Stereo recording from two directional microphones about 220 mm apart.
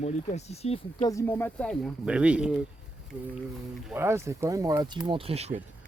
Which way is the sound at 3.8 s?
10° right (ahead or behind).